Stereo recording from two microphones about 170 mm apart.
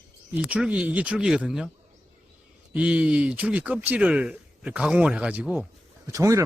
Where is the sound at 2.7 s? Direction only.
5° right (ahead or behind).